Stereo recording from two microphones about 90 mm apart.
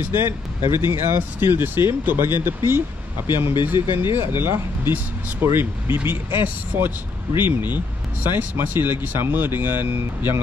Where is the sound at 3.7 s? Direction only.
25° right (ahead or behind).